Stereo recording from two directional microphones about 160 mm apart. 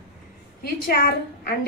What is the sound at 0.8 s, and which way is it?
Speech, 80° left.